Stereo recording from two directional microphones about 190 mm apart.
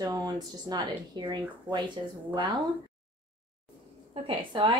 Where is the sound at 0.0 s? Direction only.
20° right (ahead or behind).